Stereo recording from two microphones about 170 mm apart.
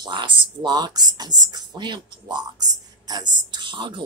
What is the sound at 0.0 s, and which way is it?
Speech, 25° right (ahead or behind).